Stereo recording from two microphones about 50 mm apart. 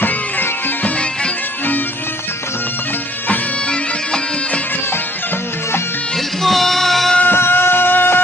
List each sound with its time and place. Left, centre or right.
0.0 s music: left
6.4 s music: centre
7.2 s music: left